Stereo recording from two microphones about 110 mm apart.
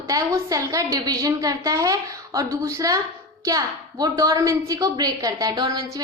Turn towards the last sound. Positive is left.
turn(degrees=-40)  # may be behind; listen again after turning